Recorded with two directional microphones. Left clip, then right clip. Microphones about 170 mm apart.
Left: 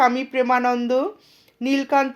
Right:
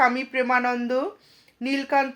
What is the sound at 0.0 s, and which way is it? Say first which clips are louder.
Speech: left 3 dB; 40° left (ahead or behind).